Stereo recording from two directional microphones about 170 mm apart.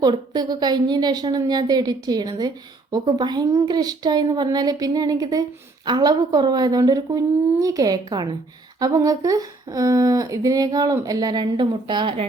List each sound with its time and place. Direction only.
0.0 s speech: 25° right (ahead or behind)